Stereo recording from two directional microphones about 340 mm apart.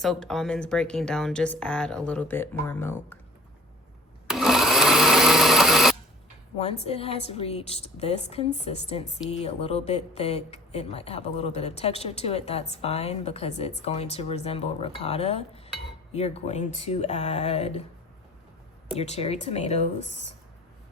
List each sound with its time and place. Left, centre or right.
0.0 s speech: centre
4.3 s sewing machine: centre
6.6 s speech: centre
18.9 s speech: centre